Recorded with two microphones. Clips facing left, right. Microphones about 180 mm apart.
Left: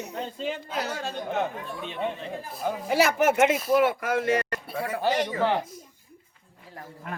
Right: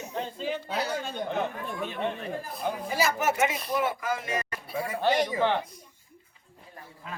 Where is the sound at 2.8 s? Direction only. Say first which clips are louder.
Left 6 dB; 65° left (ahead or behind).